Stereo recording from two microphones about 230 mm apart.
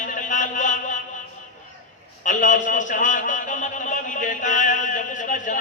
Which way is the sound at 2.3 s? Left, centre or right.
Left.